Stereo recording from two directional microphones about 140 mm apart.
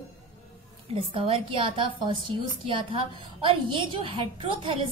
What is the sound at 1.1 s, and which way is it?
A woman's voice, 40° right (ahead or behind).